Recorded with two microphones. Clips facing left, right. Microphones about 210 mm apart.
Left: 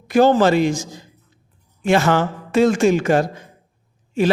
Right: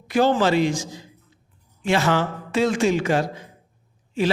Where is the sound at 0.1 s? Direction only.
45° left (ahead or behind).